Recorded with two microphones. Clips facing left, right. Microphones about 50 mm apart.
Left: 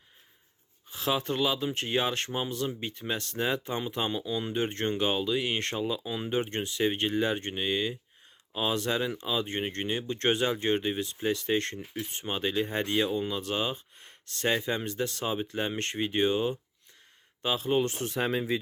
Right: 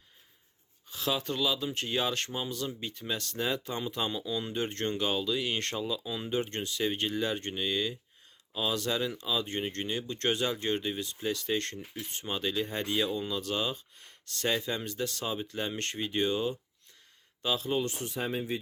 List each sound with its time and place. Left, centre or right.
0.9 s speech: left
17.8 s speech: left
18.1 s speech: left